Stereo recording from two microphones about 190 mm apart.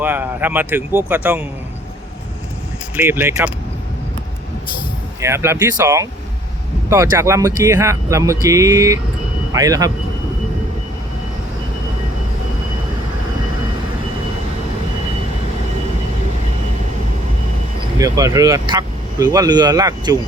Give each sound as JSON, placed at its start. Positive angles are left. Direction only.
{"t": 0.0, "sound": "speech", "side_deg": -10}
{"t": 2.9, "sound": "speech", "side_deg": -10}
{"t": 5.2, "sound": "speech", "side_deg": -15}
{"t": 17.9, "sound": "speech", "side_deg": -15}